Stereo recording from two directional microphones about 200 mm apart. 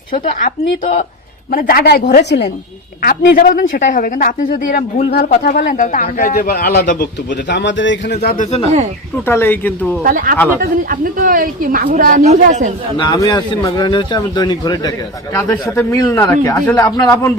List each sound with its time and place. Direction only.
0.1 s a man's voice: 45° left (ahead or behind)
9.2 s a man's voice: 10° left (ahead or behind)
10.0 s a woman's voice: 40° right (ahead or behind)
13.0 s a man's voice: 20° left (ahead or behind)